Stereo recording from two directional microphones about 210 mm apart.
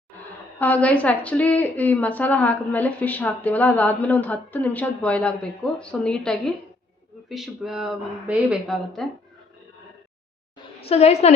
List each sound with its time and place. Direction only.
0.6 s a woman's voice: 5° left (ahead or behind)
10.8 s a woman's voice: 30° left (ahead or behind)